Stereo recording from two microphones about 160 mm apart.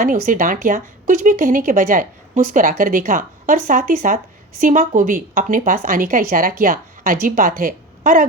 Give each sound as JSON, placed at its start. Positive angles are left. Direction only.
{"t": 0.0, "sound": "a woman's voice", "side_deg": -55}